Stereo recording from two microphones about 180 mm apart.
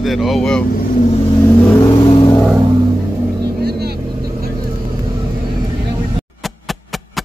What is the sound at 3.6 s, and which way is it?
Vehicle, 60° right (ahead or behind).